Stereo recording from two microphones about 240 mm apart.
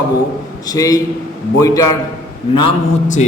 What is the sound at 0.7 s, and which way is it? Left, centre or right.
A man's voice, centre.